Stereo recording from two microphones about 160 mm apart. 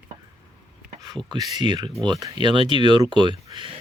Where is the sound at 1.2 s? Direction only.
25° right (ahead or behind).